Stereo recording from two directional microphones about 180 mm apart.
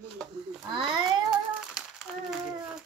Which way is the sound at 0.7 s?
30° right (ahead or behind).